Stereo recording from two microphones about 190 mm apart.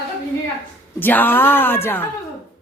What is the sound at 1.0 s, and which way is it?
Speech, 10° left (ahead or behind).